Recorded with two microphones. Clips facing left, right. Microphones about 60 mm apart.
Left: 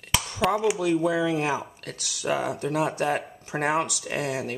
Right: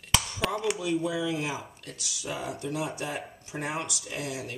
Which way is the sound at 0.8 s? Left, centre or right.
Left.